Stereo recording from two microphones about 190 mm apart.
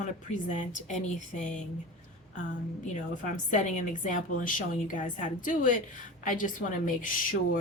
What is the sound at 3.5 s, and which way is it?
Speech, 40° left (ahead or behind).